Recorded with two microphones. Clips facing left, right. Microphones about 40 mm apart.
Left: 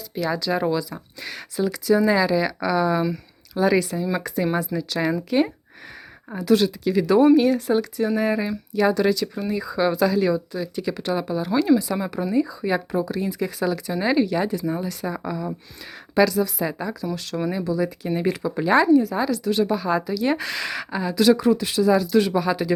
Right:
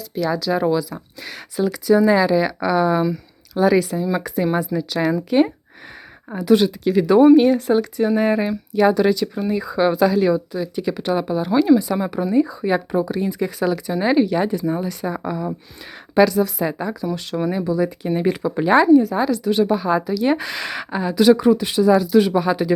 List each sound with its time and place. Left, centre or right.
0.3 s speech: centre; by 3.0 s right
3.7 s speech: centre
5.3 s speech: right
9.0 s speech: centre
9.6 s speech: right
10.5 s speech: centre
18.1 s speech: centre
18.4 s speech: right